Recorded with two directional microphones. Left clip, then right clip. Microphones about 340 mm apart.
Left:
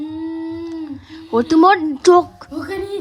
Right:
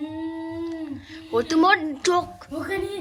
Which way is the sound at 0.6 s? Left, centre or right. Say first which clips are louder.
Left 3 dB; centre.